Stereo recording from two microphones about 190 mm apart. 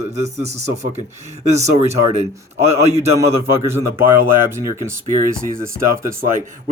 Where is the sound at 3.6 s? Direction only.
15° right (ahead or behind).